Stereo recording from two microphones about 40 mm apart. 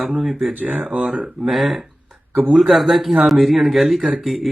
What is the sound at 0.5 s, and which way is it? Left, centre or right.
Speech, right.